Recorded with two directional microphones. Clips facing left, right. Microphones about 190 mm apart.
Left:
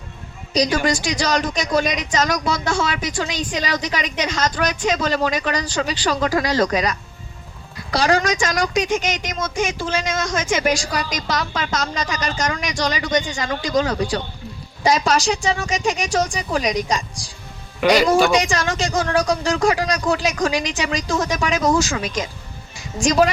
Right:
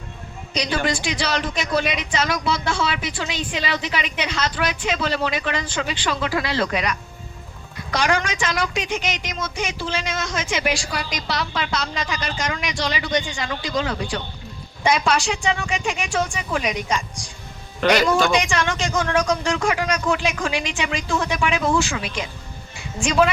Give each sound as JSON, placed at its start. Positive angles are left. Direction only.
{"t": 0.5, "sound": "a woman's voice", "side_deg": 40}
{"t": 17.7, "sound": "speech", "side_deg": 10}
{"t": 18.3, "sound": "speech", "side_deg": 40}